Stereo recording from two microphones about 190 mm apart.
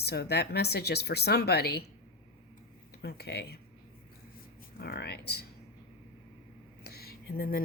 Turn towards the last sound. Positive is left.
turn(degrees=50)  # may be behind; listen again after turning